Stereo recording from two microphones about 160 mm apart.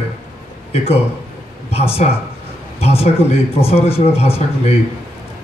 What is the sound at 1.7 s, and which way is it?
A man's voice, 40° left (ahead or behind).